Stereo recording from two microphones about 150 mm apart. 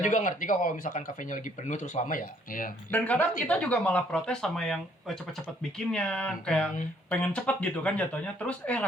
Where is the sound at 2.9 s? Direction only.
10° left (ahead or behind).